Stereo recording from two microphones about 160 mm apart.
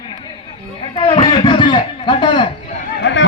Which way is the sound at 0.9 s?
30° left (ahead or behind).